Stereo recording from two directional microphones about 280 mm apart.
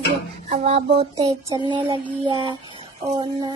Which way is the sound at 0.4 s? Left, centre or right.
Right.